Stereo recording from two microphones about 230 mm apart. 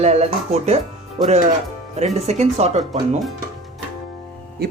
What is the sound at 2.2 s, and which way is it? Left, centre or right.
Speech, right.